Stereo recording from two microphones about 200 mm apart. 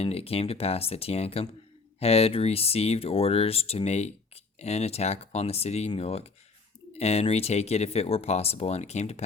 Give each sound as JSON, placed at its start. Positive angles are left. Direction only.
{"t": 0.0, "sound": "speech", "side_deg": 30}